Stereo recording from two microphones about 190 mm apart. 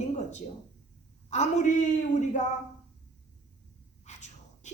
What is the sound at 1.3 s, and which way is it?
Speech, 35° left (ahead or behind).